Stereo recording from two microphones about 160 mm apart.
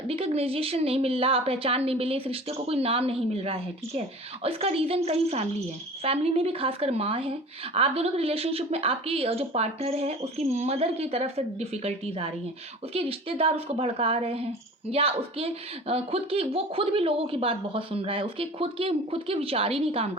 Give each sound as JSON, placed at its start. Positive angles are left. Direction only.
{"t": 0.1, "sound": "speech", "side_deg": -40}